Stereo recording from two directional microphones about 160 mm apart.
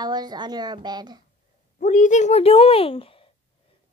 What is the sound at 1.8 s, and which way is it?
Speech, 50° left (ahead or behind).